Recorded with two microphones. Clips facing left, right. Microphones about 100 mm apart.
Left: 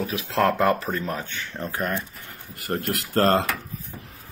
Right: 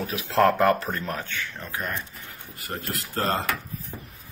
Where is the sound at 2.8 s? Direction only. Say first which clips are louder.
Left 7 dB; 60° left (ahead or behind).